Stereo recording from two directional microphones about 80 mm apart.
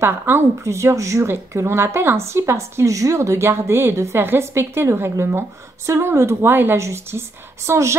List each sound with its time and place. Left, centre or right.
0.0 s speech: right